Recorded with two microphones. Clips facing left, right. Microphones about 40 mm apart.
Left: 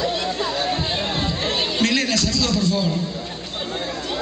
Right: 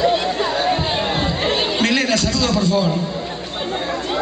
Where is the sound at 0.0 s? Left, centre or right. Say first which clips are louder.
Right 5 dB; right.